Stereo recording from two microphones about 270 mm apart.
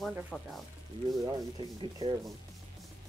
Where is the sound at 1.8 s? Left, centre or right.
Centre.